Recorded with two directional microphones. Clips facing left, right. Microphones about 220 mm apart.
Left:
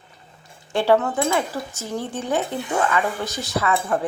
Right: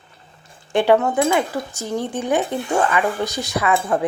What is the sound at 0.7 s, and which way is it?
Speech, 15° right (ahead or behind).